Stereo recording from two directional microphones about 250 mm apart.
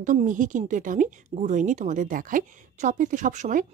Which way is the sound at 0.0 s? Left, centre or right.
Right.